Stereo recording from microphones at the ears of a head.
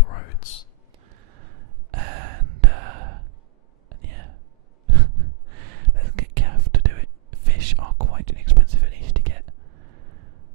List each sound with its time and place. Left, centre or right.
0.0 s whispering: left
1.0 s gasp: right
3.9 s whispering: right